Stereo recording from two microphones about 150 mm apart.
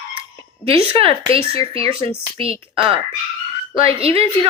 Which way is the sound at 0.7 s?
40° right (ahead or behind).